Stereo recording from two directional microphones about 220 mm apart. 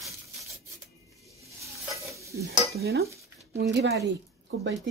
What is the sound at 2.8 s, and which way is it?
Speech, 45° right (ahead or behind).